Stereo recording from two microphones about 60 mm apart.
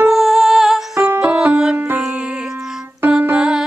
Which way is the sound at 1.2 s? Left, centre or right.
Right.